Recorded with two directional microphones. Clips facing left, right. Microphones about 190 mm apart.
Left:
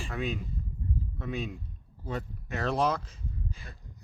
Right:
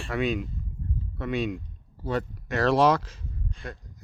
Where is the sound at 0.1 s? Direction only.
90° right.